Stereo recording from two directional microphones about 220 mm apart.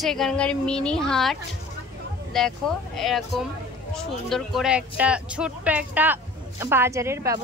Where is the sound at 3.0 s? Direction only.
Centre (ahead or behind).